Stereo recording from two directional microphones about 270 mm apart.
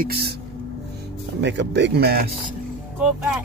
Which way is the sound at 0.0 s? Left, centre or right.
Right.